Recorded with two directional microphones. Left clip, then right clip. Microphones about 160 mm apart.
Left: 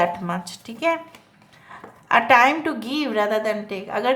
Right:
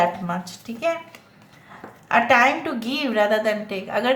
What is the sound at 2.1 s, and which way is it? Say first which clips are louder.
A woman's voice: left 1 dB; 35° left (ahead or behind).